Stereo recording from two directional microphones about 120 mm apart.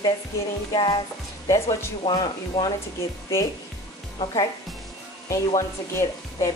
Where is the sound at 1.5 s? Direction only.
25° left (ahead or behind).